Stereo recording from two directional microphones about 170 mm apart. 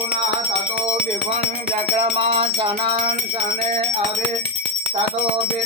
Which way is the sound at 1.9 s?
35° right (ahead or behind).